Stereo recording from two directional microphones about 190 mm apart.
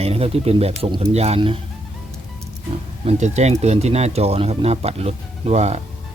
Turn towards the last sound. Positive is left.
turn(degrees=-35)  # may be behind; listen again after turning